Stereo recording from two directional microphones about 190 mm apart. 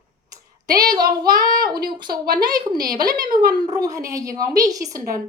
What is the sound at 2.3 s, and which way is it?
A woman's voice, 20° right (ahead or behind).